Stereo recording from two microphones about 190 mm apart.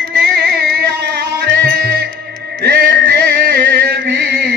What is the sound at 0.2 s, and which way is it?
Carnatic music, 60° right (ahead or behind).